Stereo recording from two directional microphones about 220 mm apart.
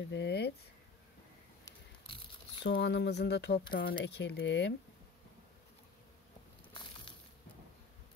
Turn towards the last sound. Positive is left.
turn(degrees=20)  # may be behind; listen again after turning